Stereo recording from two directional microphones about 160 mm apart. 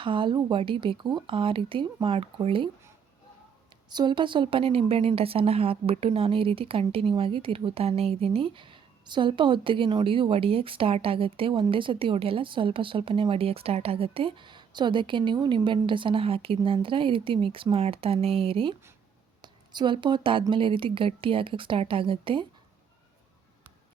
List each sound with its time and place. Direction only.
0.0 s a woman's voice: 30° right (ahead or behind)
3.8 s a woman's voice: 30° right (ahead or behind)